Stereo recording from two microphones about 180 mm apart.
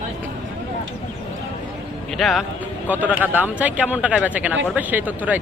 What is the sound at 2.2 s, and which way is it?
A man's voice, centre (ahead or behind).